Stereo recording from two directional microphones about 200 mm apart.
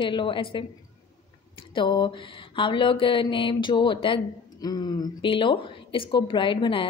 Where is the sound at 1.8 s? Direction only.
25° left (ahead or behind).